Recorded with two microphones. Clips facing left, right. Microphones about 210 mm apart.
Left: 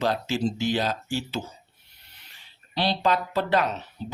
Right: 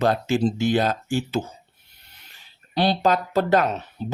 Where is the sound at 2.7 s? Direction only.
45° right (ahead or behind).